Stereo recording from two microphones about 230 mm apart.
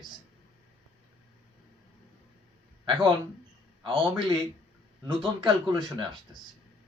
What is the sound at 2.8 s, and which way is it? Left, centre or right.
Speech, right.